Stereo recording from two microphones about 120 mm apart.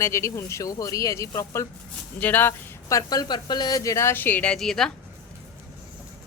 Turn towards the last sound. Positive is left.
turn(degrees=5)  # may be behind; listen again after turning